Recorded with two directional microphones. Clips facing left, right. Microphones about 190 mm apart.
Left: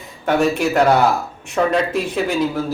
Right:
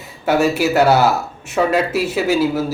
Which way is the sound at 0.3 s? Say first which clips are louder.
Right 1 dB; 5° right (ahead or behind).